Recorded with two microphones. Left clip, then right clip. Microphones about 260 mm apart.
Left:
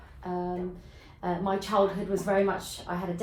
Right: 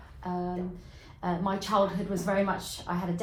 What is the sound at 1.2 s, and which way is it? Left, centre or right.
A woman's voice, right.